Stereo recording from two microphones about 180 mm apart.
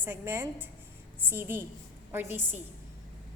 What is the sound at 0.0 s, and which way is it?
A woman's voice, 15° right (ahead or behind).